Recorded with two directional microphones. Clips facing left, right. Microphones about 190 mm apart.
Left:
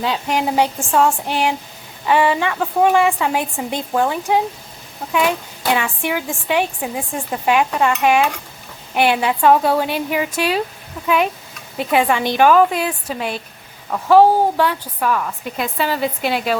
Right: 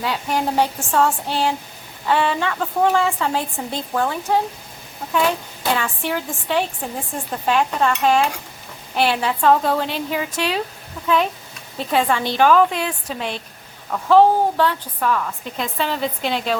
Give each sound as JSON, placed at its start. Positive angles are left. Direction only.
{"t": 0.0, "sound": "speech", "side_deg": 20}
{"t": 5.7, "sound": "speech", "side_deg": 10}